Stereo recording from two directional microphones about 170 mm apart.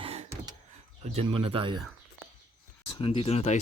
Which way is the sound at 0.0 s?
35° right (ahead or behind).